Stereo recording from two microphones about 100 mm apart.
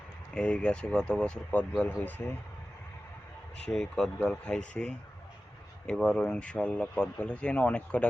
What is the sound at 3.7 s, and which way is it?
Speech, 5° left (ahead or behind).